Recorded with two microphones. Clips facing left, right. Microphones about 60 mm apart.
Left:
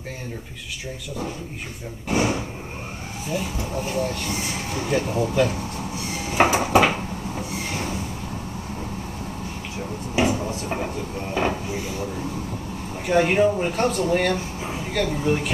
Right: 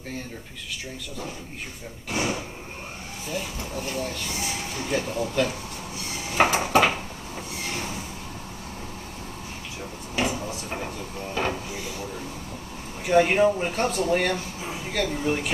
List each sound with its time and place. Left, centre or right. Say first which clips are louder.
2.0 s speech: left 5 dB; centre
3.7 s speech: left 5 dB; centre
6.3 s a sound: left 2 dB; centre
10.1 s drawer open or close: left 5 dB; centre
13.0 s speech: left 1 dB; centre